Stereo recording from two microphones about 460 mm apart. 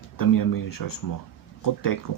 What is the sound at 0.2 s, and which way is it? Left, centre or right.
Speech, left.